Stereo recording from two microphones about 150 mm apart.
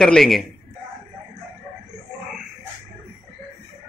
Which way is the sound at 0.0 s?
Centre (ahead or behind).